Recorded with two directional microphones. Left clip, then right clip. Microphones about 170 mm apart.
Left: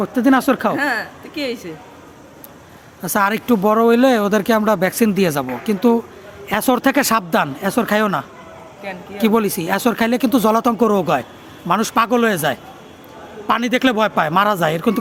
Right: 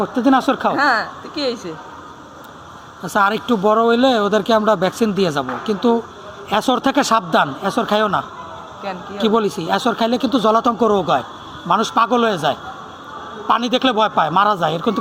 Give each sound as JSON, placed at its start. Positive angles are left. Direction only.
{"t": 0.0, "sound": "speech", "side_deg": 50}
{"t": 0.8, "sound": "a woman's voice", "side_deg": 20}
{"t": 3.0, "sound": "speech", "side_deg": 55}
{"t": 9.2, "sound": "speech", "side_deg": 55}